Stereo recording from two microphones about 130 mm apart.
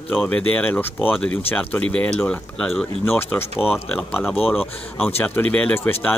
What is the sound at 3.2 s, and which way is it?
Speech, 15° left (ahead or behind).